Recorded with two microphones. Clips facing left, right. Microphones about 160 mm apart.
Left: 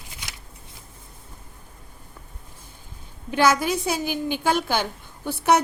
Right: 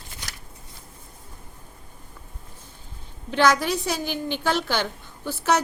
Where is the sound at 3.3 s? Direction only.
10° left (ahead or behind).